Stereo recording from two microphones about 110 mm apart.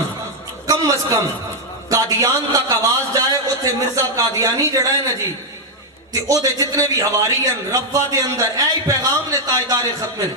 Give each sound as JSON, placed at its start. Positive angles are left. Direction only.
{"t": 0.7, "sound": "a man's voice", "side_deg": -30}
{"t": 6.1, "sound": "a man's voice", "side_deg": -30}